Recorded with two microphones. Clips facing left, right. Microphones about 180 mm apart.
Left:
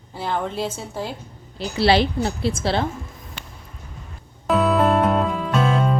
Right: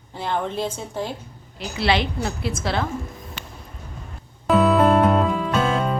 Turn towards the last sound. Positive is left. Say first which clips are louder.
# left 1 dB
turn(degrees=0)  # may be behind; listen again after turning